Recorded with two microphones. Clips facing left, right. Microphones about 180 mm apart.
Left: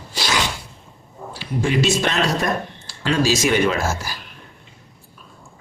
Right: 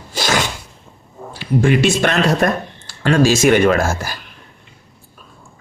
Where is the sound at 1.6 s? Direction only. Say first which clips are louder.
Right 5 dB; 55° right (ahead or behind).